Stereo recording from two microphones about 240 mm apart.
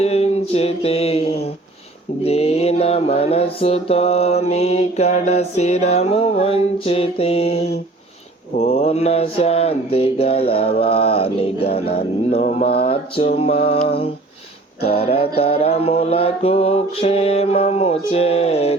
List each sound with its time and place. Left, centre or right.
0.0 s mantra: left